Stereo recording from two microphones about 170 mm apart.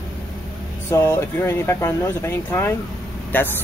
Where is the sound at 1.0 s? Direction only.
15° left (ahead or behind).